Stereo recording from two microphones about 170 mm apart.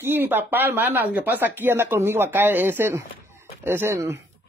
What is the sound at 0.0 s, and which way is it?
Speech, 10° right (ahead or behind).